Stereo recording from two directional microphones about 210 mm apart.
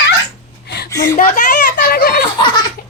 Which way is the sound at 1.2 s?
35° left (ahead or behind).